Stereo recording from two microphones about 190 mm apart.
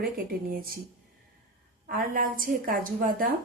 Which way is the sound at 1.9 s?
45° right (ahead or behind).